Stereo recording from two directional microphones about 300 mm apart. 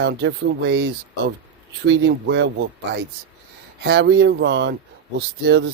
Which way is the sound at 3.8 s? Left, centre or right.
Right.